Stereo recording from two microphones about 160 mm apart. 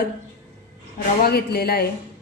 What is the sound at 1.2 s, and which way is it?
Speech, 75° left (ahead or behind).